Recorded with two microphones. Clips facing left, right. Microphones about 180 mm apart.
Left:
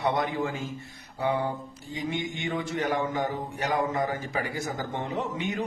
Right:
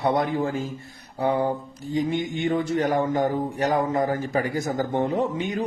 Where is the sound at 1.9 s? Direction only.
40° right (ahead or behind).